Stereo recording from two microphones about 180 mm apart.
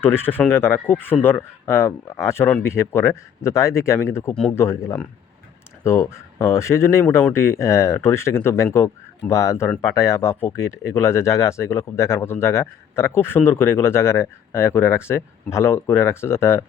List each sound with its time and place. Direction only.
0.0 s speech: 10° left (ahead or behind)
5.8 s speech: 15° left (ahead or behind)